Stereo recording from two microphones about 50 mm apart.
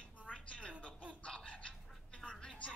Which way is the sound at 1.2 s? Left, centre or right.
Left.